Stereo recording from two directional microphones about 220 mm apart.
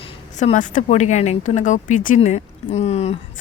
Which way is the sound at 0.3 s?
35° left (ahead or behind).